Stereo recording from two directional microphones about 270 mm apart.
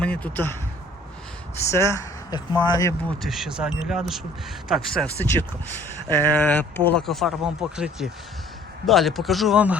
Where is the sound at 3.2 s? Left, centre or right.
Centre.